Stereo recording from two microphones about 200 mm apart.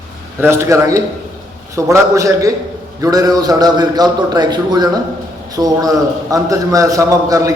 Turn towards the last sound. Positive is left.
turn(degrees=-15)  # may be behind; listen again after turning